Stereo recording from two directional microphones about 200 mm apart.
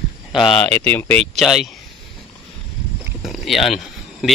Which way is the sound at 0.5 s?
10° left (ahead or behind).